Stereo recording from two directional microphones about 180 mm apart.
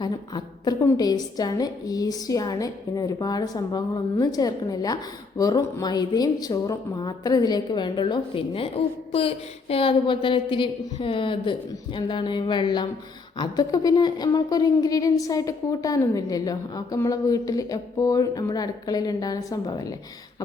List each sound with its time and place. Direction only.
0.0 s a woman's voice: 25° left (ahead or behind)